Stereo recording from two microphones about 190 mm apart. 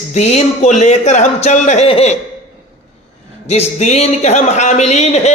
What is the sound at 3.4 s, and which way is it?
A man's voice, 35° left (ahead or behind).